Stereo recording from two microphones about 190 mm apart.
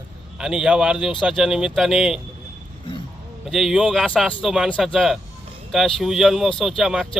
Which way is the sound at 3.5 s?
Centre (ahead or behind).